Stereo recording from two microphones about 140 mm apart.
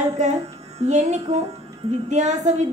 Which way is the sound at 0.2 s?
55° right (ahead or behind).